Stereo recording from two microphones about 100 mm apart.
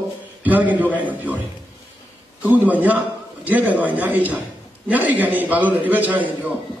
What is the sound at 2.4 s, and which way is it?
A man's voice, 15° right (ahead or behind).